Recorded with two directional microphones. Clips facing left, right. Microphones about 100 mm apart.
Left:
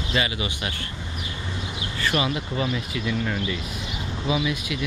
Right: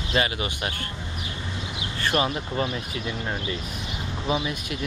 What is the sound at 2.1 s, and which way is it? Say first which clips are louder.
Speech: even; 35° right (ahead or behind).